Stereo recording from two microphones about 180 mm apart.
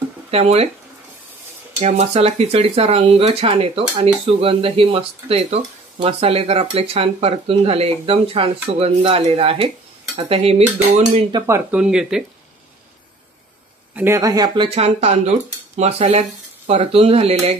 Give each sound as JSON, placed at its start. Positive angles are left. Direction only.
{"t": 0.3, "sound": "speech", "side_deg": -35}
{"t": 1.8, "sound": "speech", "side_deg": -35}
{"t": 11.3, "sound": "speech", "side_deg": -15}
{"t": 11.8, "sound": "speech", "side_deg": -5}
{"t": 13.9, "sound": "speech", "side_deg": -15}